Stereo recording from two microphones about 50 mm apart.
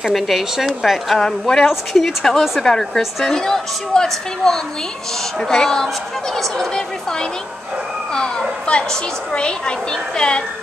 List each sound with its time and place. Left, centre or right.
0.0 s speech: centre
1.2 s a woman's voice: centre